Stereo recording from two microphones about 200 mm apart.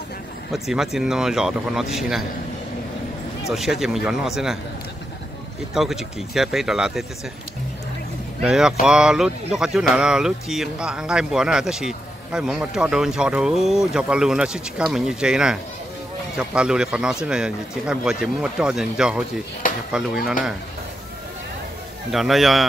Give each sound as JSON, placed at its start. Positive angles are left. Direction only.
{"t": 0.5, "sound": "speech", "side_deg": 0}
{"t": 3.4, "sound": "speech", "side_deg": 0}
{"t": 5.8, "sound": "speech", "side_deg": 0}
{"t": 8.4, "sound": "speech", "side_deg": -5}
{"t": 22.1, "sound": "speech", "side_deg": 0}